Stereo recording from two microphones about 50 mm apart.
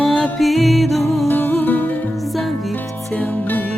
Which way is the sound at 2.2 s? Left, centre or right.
Centre.